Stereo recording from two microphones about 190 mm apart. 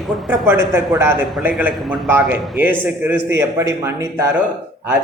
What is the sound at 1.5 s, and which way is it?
A man's voice, centre (ahead or behind).